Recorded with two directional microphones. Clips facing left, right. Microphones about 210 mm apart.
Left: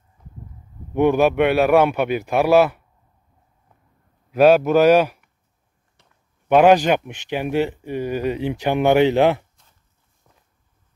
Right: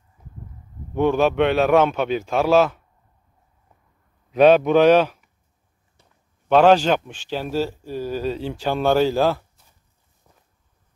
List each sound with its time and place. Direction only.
0.9 s a man's voice: 15° left (ahead or behind)
4.3 s a man's voice: 5° left (ahead or behind)
6.5 s a man's voice: 15° left (ahead or behind)
9.6 s a sound: 5° right (ahead or behind)